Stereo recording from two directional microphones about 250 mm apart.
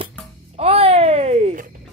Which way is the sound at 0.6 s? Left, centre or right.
Right.